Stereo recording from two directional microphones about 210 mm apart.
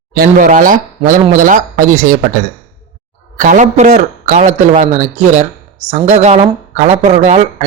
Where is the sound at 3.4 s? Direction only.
40° right (ahead or behind).